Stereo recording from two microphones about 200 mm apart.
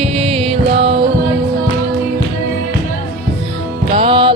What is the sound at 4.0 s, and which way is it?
Music, 25° right (ahead or behind).